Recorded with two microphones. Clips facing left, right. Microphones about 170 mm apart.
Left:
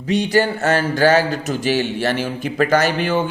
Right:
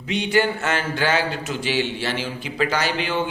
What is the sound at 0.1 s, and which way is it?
Speech, 40° left (ahead or behind).